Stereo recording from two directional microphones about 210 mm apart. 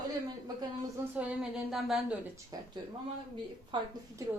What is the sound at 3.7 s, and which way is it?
Speech, 20° right (ahead or behind).